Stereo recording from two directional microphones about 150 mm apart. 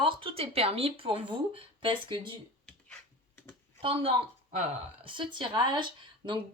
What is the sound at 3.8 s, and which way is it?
A woman's voice, 35° right (ahead or behind).